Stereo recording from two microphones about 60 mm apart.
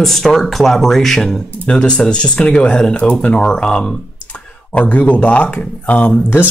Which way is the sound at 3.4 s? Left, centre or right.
Centre.